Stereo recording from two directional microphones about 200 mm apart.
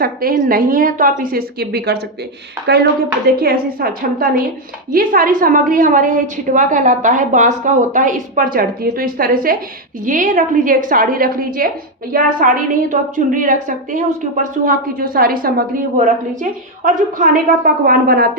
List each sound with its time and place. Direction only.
0.0 s a woman's voice: 45° right (ahead or behind)